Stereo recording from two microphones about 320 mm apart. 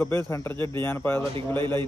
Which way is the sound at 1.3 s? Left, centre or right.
Centre.